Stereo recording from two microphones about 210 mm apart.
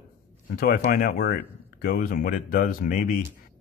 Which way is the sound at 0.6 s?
40° left (ahead or behind).